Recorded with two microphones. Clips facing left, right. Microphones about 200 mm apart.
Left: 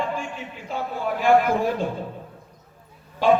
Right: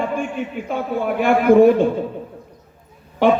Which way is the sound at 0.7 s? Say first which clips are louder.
Right 4 dB; 60° right (ahead or behind).